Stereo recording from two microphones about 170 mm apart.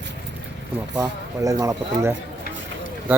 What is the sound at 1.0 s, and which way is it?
Speech, 20° right (ahead or behind).